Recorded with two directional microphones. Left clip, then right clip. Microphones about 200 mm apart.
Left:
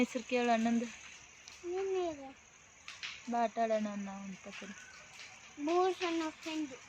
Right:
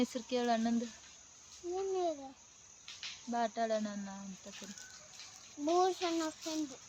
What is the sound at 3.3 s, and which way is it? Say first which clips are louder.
Speech: left 2 dB; 5° left (ahead or behind).